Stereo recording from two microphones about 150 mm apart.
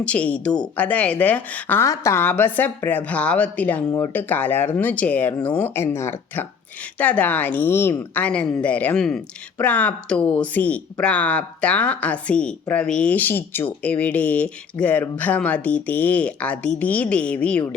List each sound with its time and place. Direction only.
0.0 s a woman's voice: 10° left (ahead or behind)